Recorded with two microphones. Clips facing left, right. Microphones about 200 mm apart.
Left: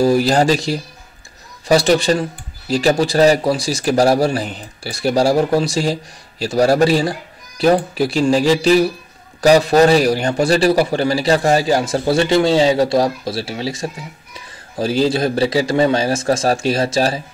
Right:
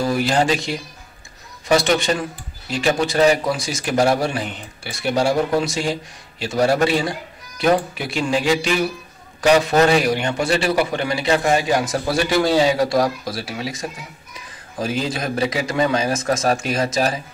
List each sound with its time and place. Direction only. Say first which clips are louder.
0.0 s a man's voice: left 5 dB; 35° left (ahead or behind)